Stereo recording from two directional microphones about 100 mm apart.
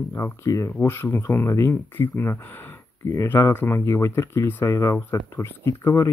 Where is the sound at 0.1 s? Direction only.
30° left (ahead or behind).